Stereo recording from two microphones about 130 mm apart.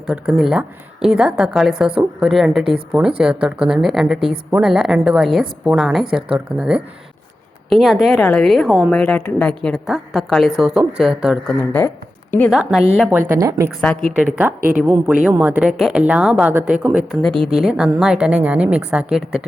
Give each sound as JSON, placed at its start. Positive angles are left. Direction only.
{"t": 0.1, "sound": "a woman's voice", "side_deg": 0}
{"t": 11.4, "sound": "speech", "side_deg": 15}
{"t": 12.5, "sound": "a woman's voice", "side_deg": -5}
{"t": 13.1, "sound": "speech", "side_deg": -15}
{"t": 13.8, "sound": "a woman's voice", "side_deg": 0}
{"t": 14.2, "sound": "a woman's voice", "side_deg": -10}
{"t": 17.2, "sound": "a woman's voice", "side_deg": 5}